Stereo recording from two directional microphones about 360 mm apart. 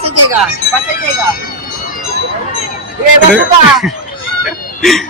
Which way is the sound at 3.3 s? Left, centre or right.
Centre.